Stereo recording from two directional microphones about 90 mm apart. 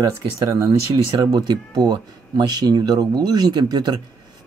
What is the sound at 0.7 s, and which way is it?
Speech, 50° right (ahead or behind).